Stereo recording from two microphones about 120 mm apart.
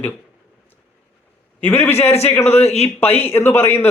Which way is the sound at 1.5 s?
15° left (ahead or behind).